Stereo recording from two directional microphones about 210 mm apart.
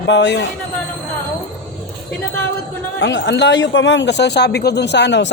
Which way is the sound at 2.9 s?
60° left (ahead or behind).